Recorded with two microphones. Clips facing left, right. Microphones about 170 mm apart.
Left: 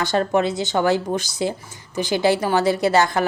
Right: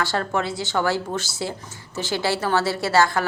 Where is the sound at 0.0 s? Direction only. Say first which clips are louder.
Left 5 dB; 20° left (ahead or behind).